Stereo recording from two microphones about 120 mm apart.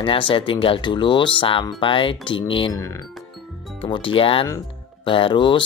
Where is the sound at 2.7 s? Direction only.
25° left (ahead or behind).